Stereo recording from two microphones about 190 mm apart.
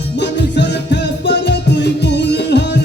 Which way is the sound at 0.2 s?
65° left (ahead or behind).